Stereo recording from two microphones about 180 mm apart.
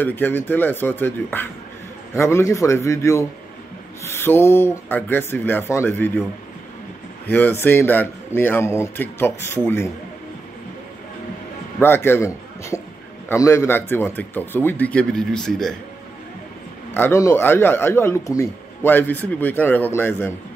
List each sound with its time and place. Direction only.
0.0 s speech: 10° left (ahead or behind)
7.2 s speech: 10° left (ahead or behind)
11.8 s a man's voice: 10° left (ahead or behind)
16.9 s speech: 15° left (ahead or behind)